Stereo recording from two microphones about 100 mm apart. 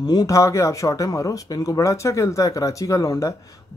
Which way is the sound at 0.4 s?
30° left (ahead or behind).